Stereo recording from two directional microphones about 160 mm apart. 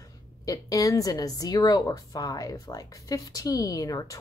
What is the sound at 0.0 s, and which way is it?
Speech, 20° left (ahead or behind).